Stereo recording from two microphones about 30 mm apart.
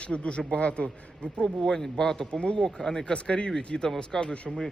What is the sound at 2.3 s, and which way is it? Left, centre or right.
Speech, left.